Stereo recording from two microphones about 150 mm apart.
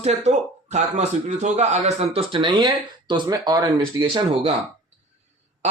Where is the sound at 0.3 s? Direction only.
50° right (ahead or behind); by 4.5 s 30° right (ahead or behind).